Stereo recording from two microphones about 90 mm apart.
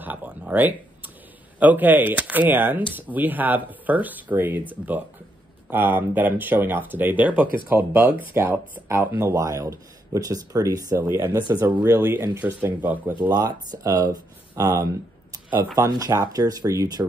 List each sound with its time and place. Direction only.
0.0 s a sound: 20° right (ahead or behind)
1.6 s speech: 20° right (ahead or behind)
5.7 s speech: 25° right (ahead or behind)
9.2 s speech: 35° right (ahead or behind)
11.1 s speech: 25° right (ahead or behind)
12.6 s speech: 20° right (ahead or behind)
13.3 s speech: 45° right (ahead or behind)